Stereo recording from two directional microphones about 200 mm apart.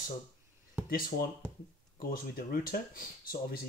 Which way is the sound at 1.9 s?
45° left (ahead or behind).